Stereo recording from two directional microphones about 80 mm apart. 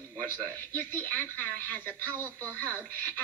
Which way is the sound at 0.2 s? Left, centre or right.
Left.